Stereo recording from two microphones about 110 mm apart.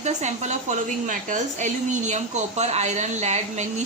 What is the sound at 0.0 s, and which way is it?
A woman's voice, 90° right.